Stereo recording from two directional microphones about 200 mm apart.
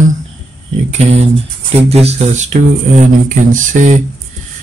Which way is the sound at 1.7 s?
30° right (ahead or behind).